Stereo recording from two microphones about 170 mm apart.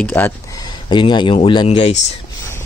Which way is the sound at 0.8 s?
30° left (ahead or behind).